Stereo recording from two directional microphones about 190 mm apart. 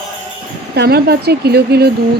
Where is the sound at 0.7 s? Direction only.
55° right (ahead or behind).